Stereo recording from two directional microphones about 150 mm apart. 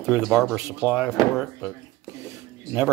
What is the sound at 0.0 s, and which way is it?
Speech, 5° right (ahead or behind).